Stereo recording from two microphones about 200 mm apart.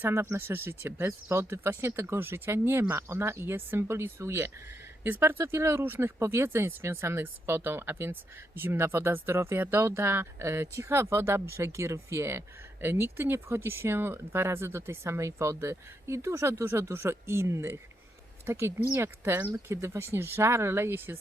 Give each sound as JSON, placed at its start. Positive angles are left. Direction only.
{"t": 0.0, "sound": "speech", "side_deg": -10}